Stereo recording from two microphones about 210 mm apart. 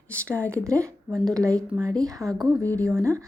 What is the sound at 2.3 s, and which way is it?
Speech, 10° left (ahead or behind).